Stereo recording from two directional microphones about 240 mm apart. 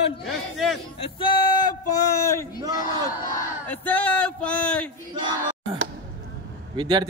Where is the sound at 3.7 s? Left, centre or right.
Centre.